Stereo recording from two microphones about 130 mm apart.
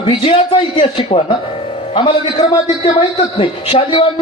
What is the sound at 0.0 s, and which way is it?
A man's voice, 45° left (ahead or behind).